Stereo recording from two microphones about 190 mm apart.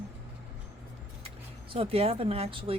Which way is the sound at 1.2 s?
30° right (ahead or behind).